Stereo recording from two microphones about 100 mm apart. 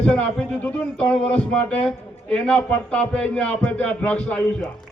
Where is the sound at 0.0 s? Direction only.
10° left (ahead or behind).